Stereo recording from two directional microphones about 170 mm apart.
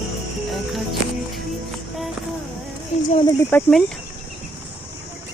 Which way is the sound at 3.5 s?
10° left (ahead or behind).